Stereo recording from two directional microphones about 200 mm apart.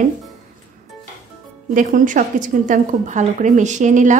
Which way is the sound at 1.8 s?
40° right (ahead or behind).